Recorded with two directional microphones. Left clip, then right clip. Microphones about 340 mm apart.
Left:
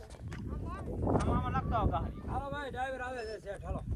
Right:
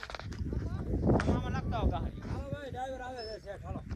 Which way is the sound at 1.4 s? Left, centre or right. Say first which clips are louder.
Left 4 dB; left.